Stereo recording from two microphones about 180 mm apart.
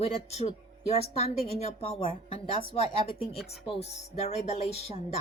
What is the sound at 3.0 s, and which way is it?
A woman's voice, 35° left (ahead or behind).